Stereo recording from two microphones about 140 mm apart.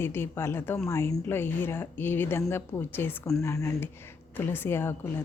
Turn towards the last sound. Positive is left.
turn(degrees=15)  # may be behind; listen again after turning